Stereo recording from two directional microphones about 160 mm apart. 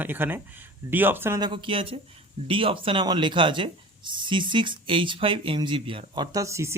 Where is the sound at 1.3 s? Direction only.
30° right (ahead or behind).